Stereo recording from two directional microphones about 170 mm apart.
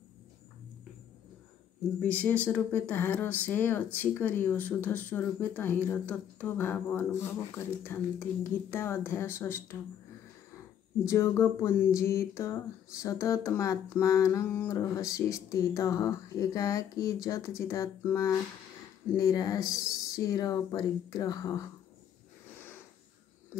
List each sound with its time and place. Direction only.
2.0 s speech: 10° left (ahead or behind)
11.1 s speech: 15° left (ahead or behind)